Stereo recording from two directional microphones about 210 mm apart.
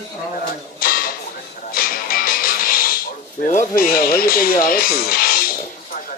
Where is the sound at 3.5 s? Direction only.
40° left (ahead or behind).